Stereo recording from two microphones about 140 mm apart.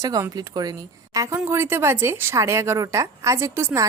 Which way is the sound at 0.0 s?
25° right (ahead or behind).